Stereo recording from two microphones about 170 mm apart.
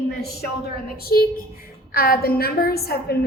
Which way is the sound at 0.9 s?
60° left (ahead or behind).